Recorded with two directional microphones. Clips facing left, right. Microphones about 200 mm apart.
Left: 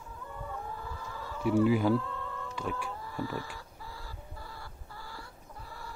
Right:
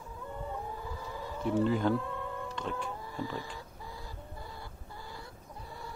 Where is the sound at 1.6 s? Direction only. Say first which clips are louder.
Left 2 dB; 10° left (ahead or behind).